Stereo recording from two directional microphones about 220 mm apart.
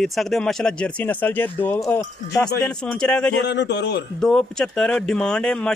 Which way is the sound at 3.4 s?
50° left (ahead or behind).